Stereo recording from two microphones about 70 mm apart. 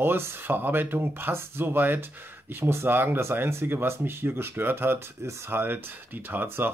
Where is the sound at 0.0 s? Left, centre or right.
Right.